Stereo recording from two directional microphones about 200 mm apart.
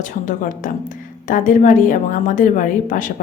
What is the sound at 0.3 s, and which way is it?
A woman's voice, 40° left (ahead or behind).